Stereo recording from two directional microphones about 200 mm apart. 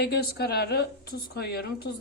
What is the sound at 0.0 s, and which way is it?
A woman's voice, 55° left (ahead or behind).